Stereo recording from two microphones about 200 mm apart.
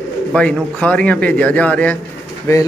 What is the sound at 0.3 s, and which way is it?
A man's voice, 5° left (ahead or behind).